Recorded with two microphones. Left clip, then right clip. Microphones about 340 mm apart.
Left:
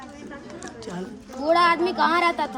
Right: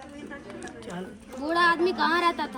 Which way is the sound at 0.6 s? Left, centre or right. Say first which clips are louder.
Left 5 dB; centre.